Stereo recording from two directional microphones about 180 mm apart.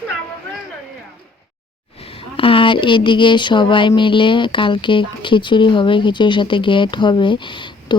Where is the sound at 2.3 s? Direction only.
30° left (ahead or behind).